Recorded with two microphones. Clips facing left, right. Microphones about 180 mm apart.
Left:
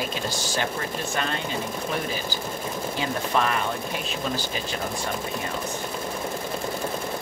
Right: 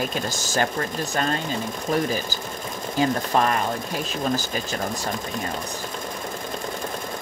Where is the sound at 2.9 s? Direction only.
40° right (ahead or behind).